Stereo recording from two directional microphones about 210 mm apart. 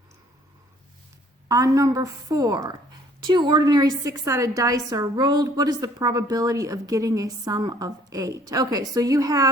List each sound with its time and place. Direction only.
1.5 s a woman's voice: 15° right (ahead or behind)